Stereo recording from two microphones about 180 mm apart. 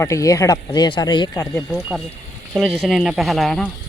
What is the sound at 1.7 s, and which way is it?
Speech, 5° right (ahead or behind).